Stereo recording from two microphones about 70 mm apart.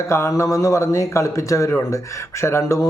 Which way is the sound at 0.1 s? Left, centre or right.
Left.